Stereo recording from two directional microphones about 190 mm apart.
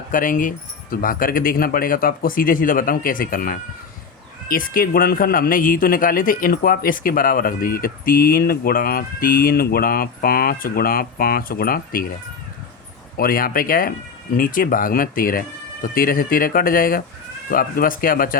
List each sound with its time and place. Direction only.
0.1 s a man's voice: 45° left (ahead or behind)
13.1 s a man's voice: 50° left (ahead or behind)